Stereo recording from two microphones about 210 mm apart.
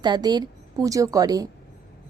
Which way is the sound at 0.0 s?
20° right (ahead or behind).